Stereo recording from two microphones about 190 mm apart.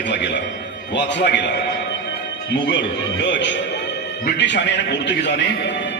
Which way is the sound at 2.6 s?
70° left (ahead or behind).